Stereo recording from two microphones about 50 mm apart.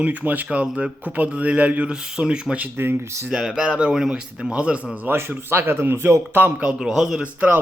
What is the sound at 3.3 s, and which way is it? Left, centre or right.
Speech, centre.